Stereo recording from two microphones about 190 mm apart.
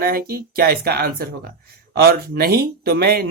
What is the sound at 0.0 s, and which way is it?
Speech, 55° right (ahead or behind).